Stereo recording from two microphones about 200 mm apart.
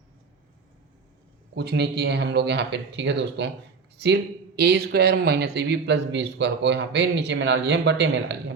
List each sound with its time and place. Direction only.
1.5 s speech: 55° right (ahead or behind)